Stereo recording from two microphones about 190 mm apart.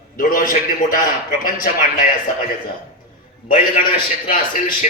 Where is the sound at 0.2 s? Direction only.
45° left (ahead or behind).